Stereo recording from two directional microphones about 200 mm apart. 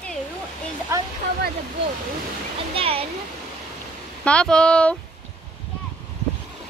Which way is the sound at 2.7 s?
30° right (ahead or behind).